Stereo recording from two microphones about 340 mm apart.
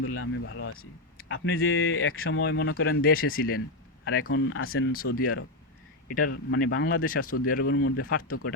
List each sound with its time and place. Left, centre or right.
0.0 s speech: left
4.3 s speech: left
6.1 s speech: left
6.9 s speech: left
7.3 s speech: left
7.5 s speech: left
7.8 s speech: left